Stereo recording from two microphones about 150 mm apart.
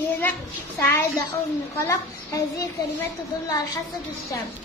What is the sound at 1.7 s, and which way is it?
Speech, 20° left (ahead or behind).